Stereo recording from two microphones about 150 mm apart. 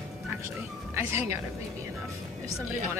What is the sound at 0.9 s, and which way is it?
Speech, 15° right (ahead or behind).